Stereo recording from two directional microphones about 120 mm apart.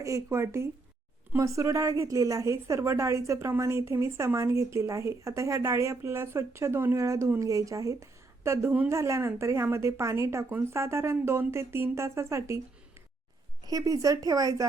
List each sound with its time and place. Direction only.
0.0 s a woman's voice: 25° right (ahead or behind)
13.7 s a woman's voice: 30° right (ahead or behind)